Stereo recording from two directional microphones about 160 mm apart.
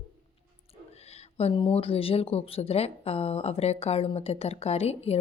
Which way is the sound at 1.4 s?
35° left (ahead or behind).